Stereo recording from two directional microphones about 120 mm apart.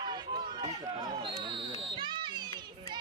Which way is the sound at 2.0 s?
40° right (ahead or behind).